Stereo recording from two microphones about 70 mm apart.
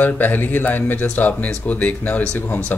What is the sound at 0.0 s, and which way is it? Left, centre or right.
Speech, left.